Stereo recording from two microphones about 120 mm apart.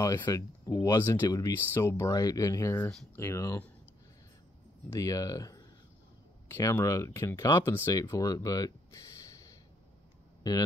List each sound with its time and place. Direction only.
0.3 s speech: 25° left (ahead or behind)
4.8 s speech: 25° left (ahead or behind)